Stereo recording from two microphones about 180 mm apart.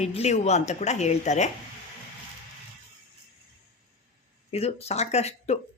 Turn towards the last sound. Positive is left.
turn(degrees=35)  # may be behind; listen again after turning